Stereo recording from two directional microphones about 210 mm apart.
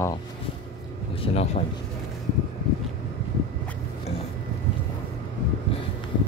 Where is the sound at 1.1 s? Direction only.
25° left (ahead or behind).